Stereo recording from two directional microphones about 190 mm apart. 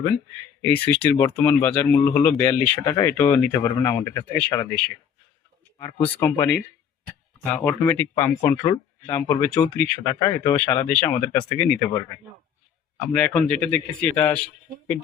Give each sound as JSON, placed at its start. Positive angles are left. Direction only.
{"t": 0.9, "sound": "speech", "side_deg": 10}
{"t": 6.0, "sound": "speech", "side_deg": 10}
{"t": 7.5, "sound": "speech", "side_deg": 5}
{"t": 13.1, "sound": "speech", "side_deg": 5}